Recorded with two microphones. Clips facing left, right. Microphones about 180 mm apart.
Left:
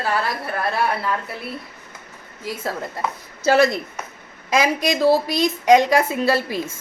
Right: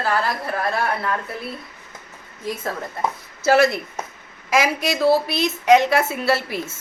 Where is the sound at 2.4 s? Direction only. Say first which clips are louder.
Right 1 dB; 10° left (ahead or behind).